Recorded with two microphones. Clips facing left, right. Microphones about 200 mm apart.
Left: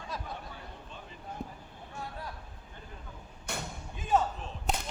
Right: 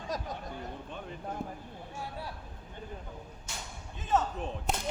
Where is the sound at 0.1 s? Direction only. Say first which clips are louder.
Right 4 dB; 40° right (ahead or behind).